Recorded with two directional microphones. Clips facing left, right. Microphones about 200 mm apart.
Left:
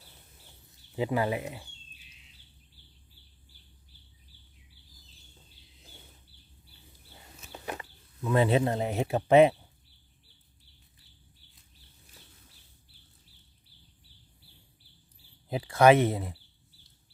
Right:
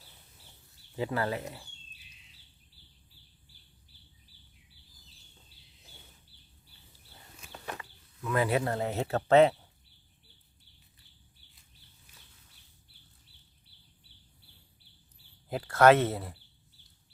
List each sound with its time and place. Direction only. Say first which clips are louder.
0.9 s speech: left 3 dB; 15° left (ahead or behind)
7.5 s a sound: left 3 dB; 15° left (ahead or behind)
7.8 s speech: left 4 dB; 25° left (ahead or behind)
15.4 s speech: left 1 dB; 15° left (ahead or behind)